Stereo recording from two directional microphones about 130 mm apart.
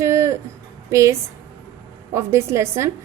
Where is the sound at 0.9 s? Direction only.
25° right (ahead or behind).